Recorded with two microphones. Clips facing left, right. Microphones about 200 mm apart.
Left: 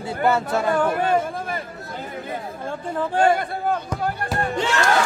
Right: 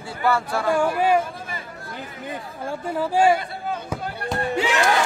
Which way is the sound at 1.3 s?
50° left (ahead or behind).